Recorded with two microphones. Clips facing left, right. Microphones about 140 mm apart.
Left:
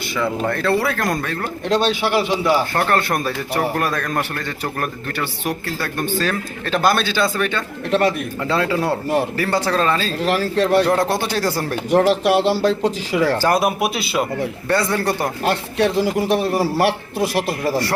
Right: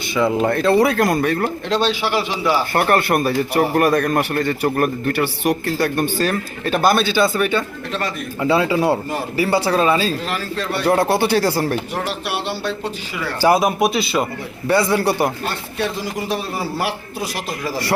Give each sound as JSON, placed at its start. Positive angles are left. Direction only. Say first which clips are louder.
{"t": 0.2, "sound": "speech", "louder": "right 4 dB", "side_deg": -20}
{"t": 2.7, "sound": "speech", "louder": "right 3 dB", "side_deg": -10}
{"t": 7.9, "sound": "a man's voice", "louder": "left 7 dB", "side_deg": 65}
{"t": 8.4, "sound": "speech", "louder": "right 6 dB", "side_deg": -10}
{"t": 10.2, "sound": "speech", "louder": "left 7 dB", "side_deg": 80}
{"t": 10.8, "sound": "speech", "louder": "right 2 dB", "side_deg": -5}
{"t": 11.9, "sound": "speech", "louder": "left 10 dB", "side_deg": 90}
{"t": 13.6, "sound": "a man's voice", "louder": "right 2 dB", "side_deg": 5}
{"t": 14.7, "sound": "speech", "louder": "right 3 dB", "side_deg": -10}
{"t": 15.4, "sound": "a man's voice", "louder": "left 5 dB", "side_deg": 75}